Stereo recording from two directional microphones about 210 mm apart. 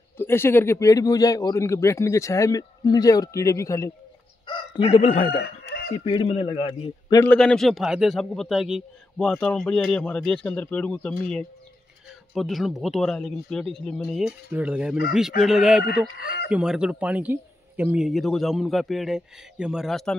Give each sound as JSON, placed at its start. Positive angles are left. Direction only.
{"t": 0.2, "sound": "speech", "side_deg": 10}
{"t": 5.3, "sound": "chicken", "side_deg": 50}
{"t": 6.0, "sound": "a man's voice", "side_deg": 25}
{"t": 7.2, "sound": "a man's voice", "side_deg": 5}
{"t": 16.2, "sound": "speech", "side_deg": 45}
{"t": 16.4, "sound": "a man's voice", "side_deg": -5}